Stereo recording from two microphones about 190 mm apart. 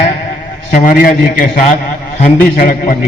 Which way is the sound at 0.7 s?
45° left (ahead or behind).